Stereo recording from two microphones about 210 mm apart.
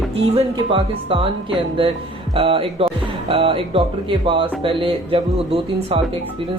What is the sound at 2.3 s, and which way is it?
Speech, 25° right (ahead or behind).